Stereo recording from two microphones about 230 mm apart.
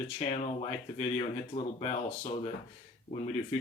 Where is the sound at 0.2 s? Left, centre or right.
Left.